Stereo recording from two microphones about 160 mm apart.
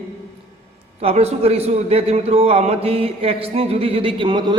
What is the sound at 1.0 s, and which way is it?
A man's voice, 40° right (ahead or behind).